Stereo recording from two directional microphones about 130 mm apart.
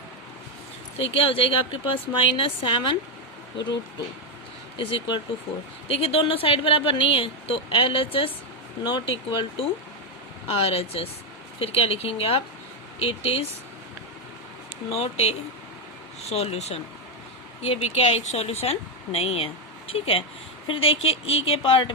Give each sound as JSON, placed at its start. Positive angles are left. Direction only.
{"t": 0.9, "sound": "speech", "side_deg": 45}
{"t": 4.8, "sound": "speech", "side_deg": 40}
{"t": 14.8, "sound": "speech", "side_deg": 55}